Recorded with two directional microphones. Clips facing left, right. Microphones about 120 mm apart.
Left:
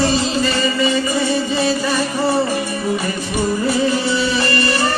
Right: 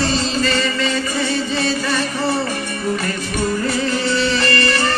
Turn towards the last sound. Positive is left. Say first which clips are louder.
# even
turn(degrees=15)  # may be behind; listen again after turning